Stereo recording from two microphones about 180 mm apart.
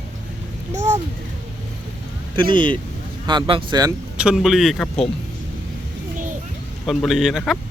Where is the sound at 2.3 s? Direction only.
25° right (ahead or behind).